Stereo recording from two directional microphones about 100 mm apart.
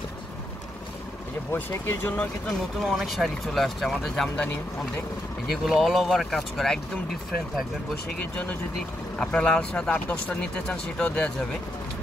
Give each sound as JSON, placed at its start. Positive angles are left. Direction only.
{"t": 1.5, "sound": "speech", "side_deg": 20}
{"t": 2.8, "sound": "speech", "side_deg": 0}
{"t": 5.5, "sound": "speech", "side_deg": 0}
{"t": 9.2, "sound": "speech", "side_deg": 10}